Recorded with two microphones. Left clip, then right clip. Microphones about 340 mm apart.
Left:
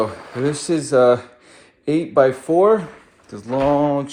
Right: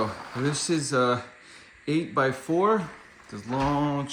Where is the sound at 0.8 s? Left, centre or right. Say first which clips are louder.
Left 12 dB; centre.